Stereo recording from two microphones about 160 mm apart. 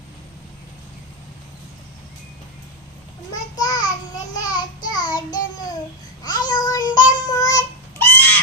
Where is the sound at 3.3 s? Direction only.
25° left (ahead or behind).